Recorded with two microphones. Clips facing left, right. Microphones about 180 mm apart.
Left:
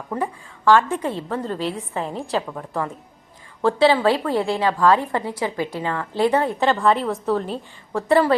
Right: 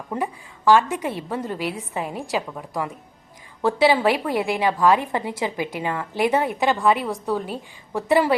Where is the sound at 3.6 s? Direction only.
15° right (ahead or behind).